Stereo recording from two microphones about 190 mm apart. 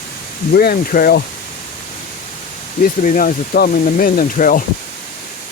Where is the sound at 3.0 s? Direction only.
45° left (ahead or behind).